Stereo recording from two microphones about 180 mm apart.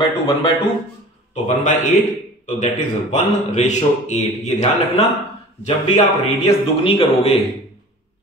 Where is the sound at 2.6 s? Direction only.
40° left (ahead or behind).